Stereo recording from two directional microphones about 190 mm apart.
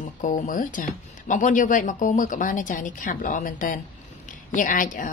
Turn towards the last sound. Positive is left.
turn(degrees=45)  # may be behind; listen again after turning